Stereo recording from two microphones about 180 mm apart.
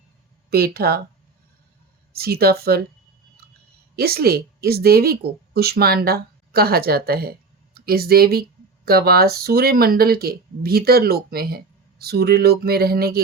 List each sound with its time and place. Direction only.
0.5 s speech: 60° right (ahead or behind)
2.1 s speech: 60° right (ahead or behind)
3.9 s speech: 60° right (ahead or behind)